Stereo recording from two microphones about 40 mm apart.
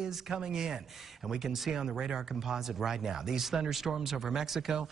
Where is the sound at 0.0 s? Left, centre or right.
Centre.